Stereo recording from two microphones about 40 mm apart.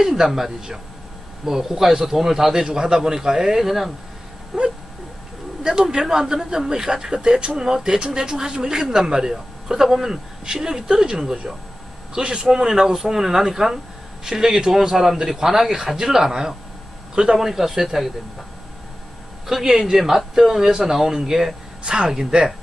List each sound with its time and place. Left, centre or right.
0.0 s a man's voice: centre
19.5 s a man's voice: centre